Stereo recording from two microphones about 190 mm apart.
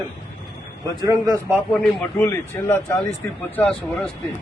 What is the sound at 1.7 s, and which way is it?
A man's voice, 5° left (ahead or behind).